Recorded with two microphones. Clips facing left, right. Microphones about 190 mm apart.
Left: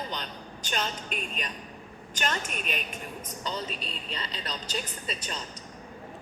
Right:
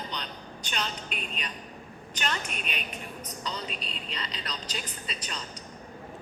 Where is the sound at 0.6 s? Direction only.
45° left (ahead or behind).